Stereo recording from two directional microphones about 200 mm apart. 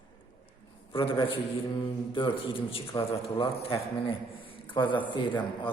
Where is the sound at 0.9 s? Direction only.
25° left (ahead or behind).